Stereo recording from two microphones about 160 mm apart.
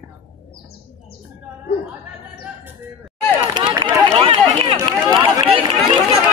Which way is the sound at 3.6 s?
30° right (ahead or behind).